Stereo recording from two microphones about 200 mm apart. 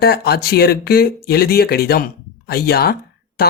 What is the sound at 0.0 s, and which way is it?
Speech, 50° left (ahead or behind).